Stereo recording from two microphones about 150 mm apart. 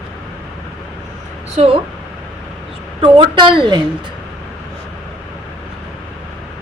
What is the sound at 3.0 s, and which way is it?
Speech, 35° right (ahead or behind).